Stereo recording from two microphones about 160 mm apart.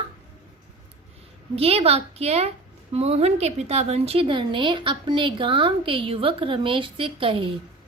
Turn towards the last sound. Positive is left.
turn(degrees=-35)  # may be behind; listen again after turning